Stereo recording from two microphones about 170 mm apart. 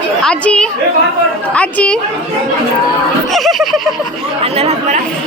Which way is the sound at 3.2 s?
Centre (ahead or behind).